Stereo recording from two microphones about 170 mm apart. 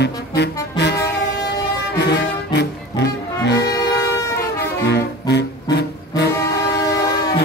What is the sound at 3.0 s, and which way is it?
Music, 75° left (ahead or behind).